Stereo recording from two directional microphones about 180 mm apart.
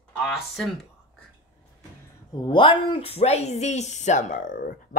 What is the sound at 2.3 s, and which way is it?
Speech, 25° left (ahead or behind).